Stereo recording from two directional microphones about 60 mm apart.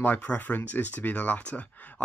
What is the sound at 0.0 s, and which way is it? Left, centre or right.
Speech, left.